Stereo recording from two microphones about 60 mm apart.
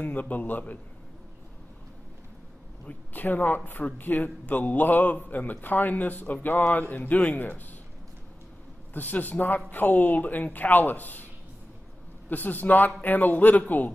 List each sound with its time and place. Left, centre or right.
0.0 s speech: left
2.9 s speech: left
8.9 s a man's voice: left
12.3 s a man's voice: left